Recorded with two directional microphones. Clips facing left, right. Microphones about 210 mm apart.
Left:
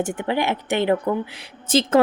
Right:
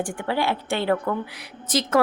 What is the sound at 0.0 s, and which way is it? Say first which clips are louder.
Speech: left 2 dB; 20° left (ahead or behind).